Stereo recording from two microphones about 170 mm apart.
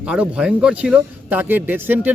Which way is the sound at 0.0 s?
5° right (ahead or behind).